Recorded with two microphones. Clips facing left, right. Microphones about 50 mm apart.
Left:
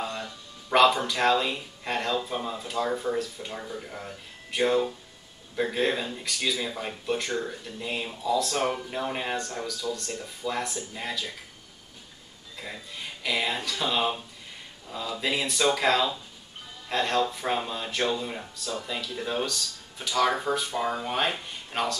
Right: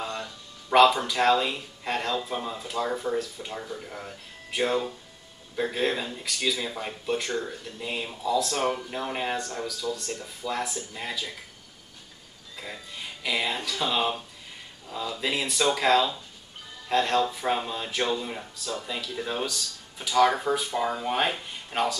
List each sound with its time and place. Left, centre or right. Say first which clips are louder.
0.0 s speech: even; centre
12.5 s speech: even; centre